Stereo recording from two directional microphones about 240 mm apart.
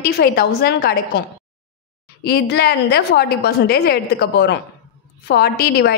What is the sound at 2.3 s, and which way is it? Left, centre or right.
A woman's voice, left.